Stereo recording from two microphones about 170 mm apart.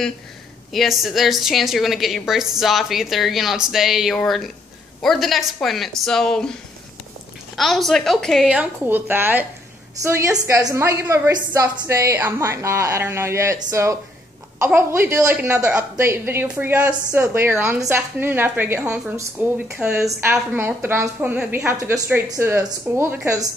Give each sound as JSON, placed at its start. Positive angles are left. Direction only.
{"t": 0.7, "sound": "a woman's voice", "side_deg": 0}
{"t": 7.5, "sound": "a woman's voice", "side_deg": 0}